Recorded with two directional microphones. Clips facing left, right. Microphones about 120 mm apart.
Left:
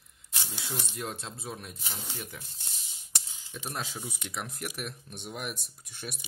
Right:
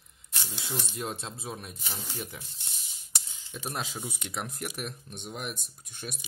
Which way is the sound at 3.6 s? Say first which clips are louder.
Right 2 dB; 10° right (ahead or behind).